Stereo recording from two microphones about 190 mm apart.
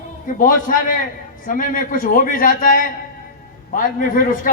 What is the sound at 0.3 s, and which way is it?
A man's voice, 45° left (ahead or behind).